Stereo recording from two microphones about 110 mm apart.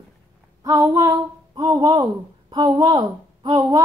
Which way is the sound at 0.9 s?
35° right (ahead or behind).